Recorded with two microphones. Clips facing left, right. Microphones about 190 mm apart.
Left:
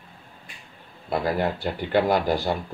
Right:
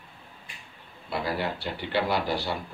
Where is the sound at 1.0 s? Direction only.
50° left (ahead or behind).